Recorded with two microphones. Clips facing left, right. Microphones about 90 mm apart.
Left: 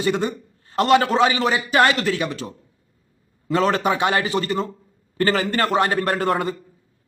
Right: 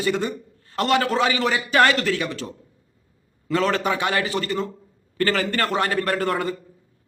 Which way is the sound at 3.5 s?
25° left (ahead or behind).